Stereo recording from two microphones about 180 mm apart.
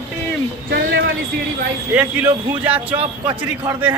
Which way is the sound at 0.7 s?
65° right (ahead or behind).